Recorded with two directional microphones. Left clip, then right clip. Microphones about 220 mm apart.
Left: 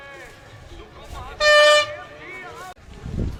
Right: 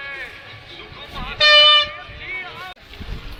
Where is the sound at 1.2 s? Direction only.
40° left (ahead or behind).